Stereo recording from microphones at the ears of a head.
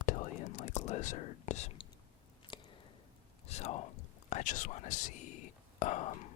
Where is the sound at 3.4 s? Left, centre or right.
Left.